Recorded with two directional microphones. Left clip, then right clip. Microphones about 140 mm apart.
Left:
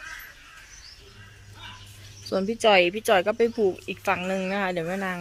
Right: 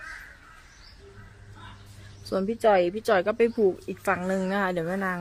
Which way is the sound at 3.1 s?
10° right (ahead or behind).